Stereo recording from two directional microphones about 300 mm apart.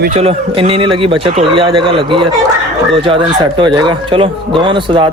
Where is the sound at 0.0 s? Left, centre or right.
Right.